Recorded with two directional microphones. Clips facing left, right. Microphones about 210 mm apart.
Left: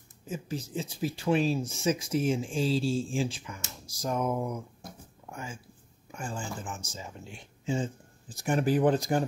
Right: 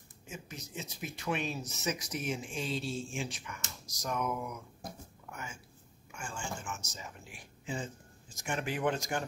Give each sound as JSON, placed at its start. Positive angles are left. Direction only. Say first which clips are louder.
{"t": 0.3, "sound": "speech", "louder": "left 10 dB", "side_deg": 30}
{"t": 3.8, "sound": "a sound", "louder": "left 5 dB", "side_deg": 30}
{"t": 6.1, "sound": "speech", "louder": "left 5 dB", "side_deg": 35}